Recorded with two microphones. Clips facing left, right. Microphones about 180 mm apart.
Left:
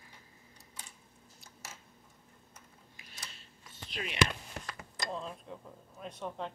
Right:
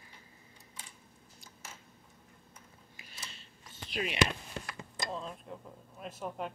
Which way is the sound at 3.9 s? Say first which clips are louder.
Right 5 dB; 10° right (ahead or behind).